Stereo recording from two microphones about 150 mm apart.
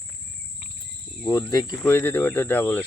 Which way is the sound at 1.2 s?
20° left (ahead or behind).